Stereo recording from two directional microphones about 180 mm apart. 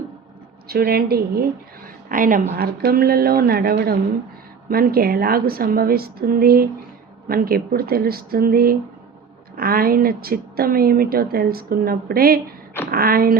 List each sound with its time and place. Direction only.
0.7 s a woman's voice: 60° right (ahead or behind)
2.0 s a woman's voice: 50° right (ahead or behind)